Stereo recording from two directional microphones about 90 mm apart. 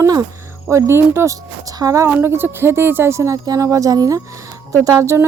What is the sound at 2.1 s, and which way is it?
Speech, 25° right (ahead or behind).